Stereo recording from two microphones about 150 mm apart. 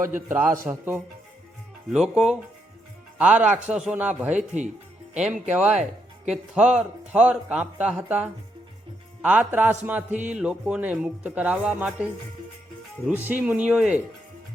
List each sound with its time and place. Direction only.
0.0 s speech: 15° right (ahead or behind)
4.4 s speech: 50° right (ahead or behind)
5.1 s speech: 5° right (ahead or behind)
13.1 s speech: 10° right (ahead or behind)